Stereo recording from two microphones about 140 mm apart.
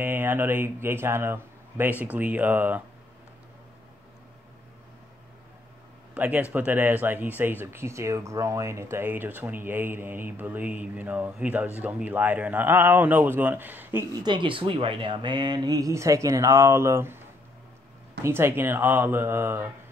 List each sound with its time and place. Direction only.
0.0 s speech: 15° right (ahead or behind)
6.1 s a man's voice: 10° right (ahead or behind)
14.1 s speech: 30° right (ahead or behind)
18.2 s speech: 15° right (ahead or behind)